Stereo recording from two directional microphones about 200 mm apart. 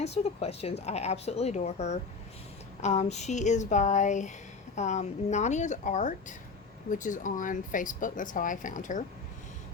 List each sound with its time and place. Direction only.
0.0 s speech: 30° left (ahead or behind)